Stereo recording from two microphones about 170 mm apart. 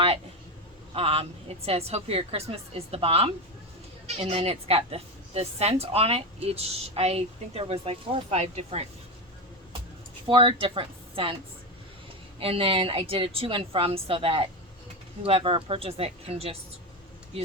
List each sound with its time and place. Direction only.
0.9 s a woman's voice: 35° right (ahead or behind)
10.2 s speech: 30° right (ahead or behind)
12.4 s a woman's voice: 35° right (ahead or behind)